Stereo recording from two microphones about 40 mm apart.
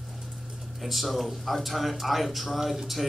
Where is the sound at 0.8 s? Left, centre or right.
Centre.